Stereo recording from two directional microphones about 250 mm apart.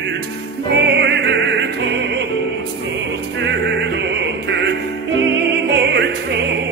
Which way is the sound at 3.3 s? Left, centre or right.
Right.